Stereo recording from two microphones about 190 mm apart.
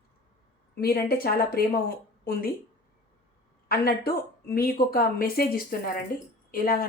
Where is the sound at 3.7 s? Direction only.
55° left (ahead or behind).